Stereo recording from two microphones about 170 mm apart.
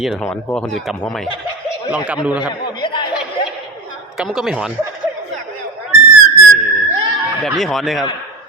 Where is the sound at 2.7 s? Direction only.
30° left (ahead or behind).